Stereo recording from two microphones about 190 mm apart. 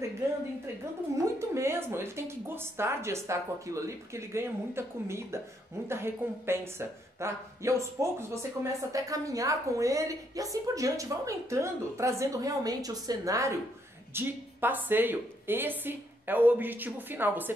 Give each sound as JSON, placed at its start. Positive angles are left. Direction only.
{"t": 1.1, "sound": "a woman's voice", "side_deg": -15}